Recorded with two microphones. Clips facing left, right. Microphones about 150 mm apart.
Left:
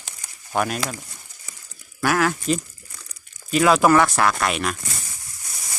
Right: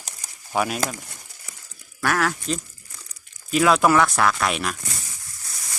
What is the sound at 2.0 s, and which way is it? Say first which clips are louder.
Speech: left 2 dB; centre (ahead or behind).